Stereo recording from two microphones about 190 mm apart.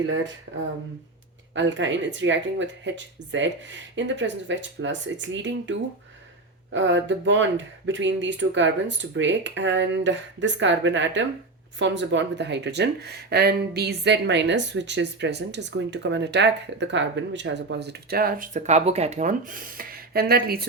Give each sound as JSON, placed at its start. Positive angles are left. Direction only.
{"t": 1.5, "sound": "speech", "side_deg": -75}
{"t": 6.7, "sound": "speech", "side_deg": -75}